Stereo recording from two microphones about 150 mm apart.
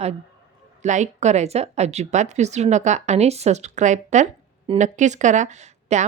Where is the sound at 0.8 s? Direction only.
55° right (ahead or behind).